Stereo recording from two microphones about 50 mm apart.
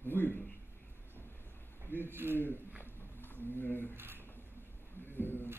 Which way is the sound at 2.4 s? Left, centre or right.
Left.